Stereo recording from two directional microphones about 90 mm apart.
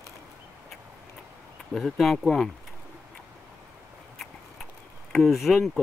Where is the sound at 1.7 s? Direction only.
Centre (ahead or behind).